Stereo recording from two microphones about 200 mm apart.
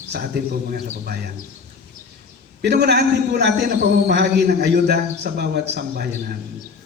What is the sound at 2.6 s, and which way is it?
A man's voice, 55° right (ahead or behind).